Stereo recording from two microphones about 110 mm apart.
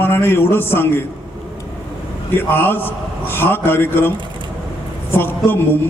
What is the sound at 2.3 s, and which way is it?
A man's voice, 20° left (ahead or behind).